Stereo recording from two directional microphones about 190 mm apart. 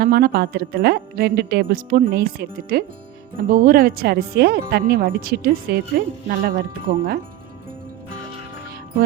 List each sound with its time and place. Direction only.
0.0 s speech: 50° right (ahead or behind)